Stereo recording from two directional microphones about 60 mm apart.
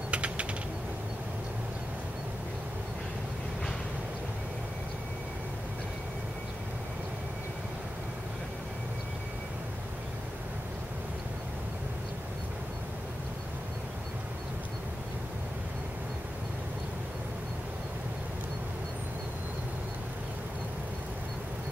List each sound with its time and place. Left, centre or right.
0.1 s typing: right